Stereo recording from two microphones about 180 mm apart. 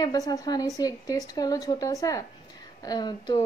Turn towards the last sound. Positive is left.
turn(degrees=25)  # may be behind; listen again after turning